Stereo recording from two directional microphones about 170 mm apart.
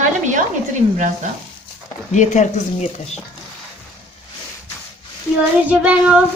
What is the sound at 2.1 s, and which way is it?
Speech, 45° left (ahead or behind).